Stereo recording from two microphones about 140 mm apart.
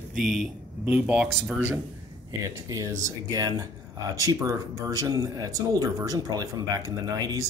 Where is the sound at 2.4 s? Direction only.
20° right (ahead or behind).